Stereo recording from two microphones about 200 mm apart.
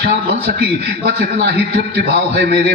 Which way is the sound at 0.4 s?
50° right (ahead or behind).